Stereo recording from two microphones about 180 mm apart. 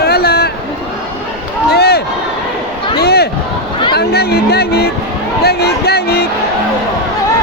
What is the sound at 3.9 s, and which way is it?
Chatter, 60° left (ahead or behind).